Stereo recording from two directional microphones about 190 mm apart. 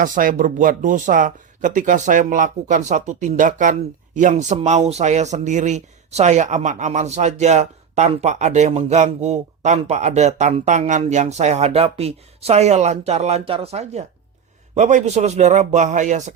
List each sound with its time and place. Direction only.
0.0 s speech: 45° right (ahead or behind)